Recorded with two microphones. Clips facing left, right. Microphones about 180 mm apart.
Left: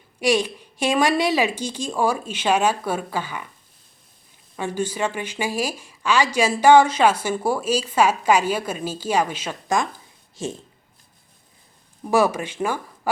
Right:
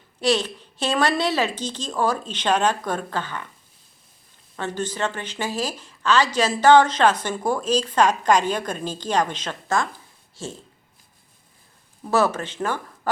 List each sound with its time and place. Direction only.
0.2 s speech: 10° left (ahead or behind)
4.5 s speech: 10° left (ahead or behind)
12.0 s speech: 10° left (ahead or behind)